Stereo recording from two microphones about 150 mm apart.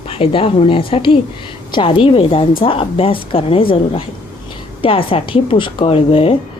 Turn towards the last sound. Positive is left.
turn(degrees=40)  # may be behind; listen again after turning